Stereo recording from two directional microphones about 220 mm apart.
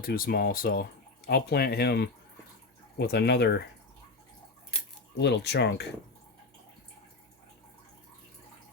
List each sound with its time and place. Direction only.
0.0 s speech: 45° left (ahead or behind)
5.1 s speech: 50° left (ahead or behind)